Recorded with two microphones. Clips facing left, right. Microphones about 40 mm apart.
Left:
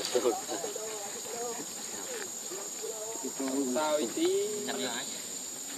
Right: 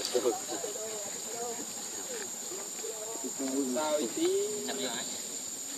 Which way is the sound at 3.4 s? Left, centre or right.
Left.